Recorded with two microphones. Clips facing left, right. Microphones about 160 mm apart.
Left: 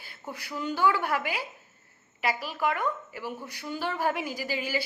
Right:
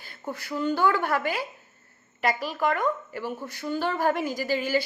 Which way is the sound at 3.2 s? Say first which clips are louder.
Right 4 dB; 10° left (ahead or behind).